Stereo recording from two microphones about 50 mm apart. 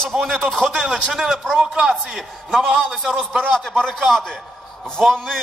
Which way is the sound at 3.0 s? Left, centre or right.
Centre.